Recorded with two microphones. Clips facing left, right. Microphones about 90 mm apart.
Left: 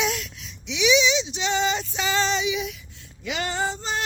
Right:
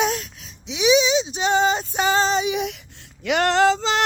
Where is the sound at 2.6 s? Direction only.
70° right (ahead or behind); by 4.0 s 90° right.